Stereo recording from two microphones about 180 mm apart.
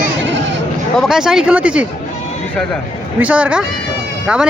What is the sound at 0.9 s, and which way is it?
Speech, 5° right (ahead or behind).